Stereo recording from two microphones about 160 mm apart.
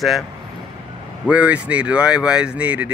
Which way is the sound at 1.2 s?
10° right (ahead or behind).